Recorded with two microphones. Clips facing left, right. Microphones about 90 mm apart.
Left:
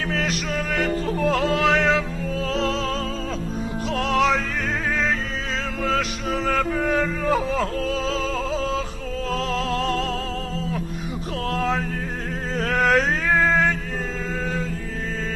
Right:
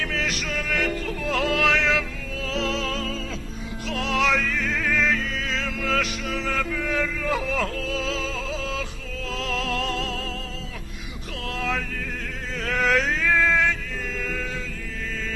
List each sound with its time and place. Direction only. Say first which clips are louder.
0.1 s music: left 3 dB; 35° left (ahead or behind)
11.5 s music: left 4 dB; 40° left (ahead or behind)
12.5 s a sound: left 3 dB; 45° left (ahead or behind)